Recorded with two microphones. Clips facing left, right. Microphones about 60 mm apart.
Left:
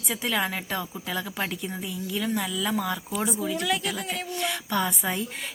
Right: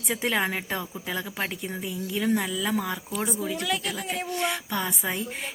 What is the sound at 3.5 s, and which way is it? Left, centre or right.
Speech, centre.